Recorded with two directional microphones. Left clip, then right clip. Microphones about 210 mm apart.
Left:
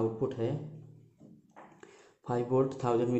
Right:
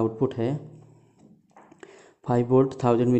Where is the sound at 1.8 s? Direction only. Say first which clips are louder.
Right 7 dB; 40° right (ahead or behind).